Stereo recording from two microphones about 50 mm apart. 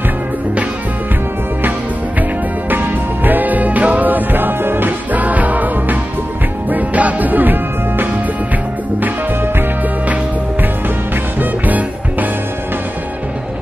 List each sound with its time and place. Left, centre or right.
2.7 s music: right
11.3 s music: right